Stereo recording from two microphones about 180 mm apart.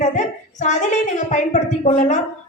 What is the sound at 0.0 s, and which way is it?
A woman's voice, 40° left (ahead or behind).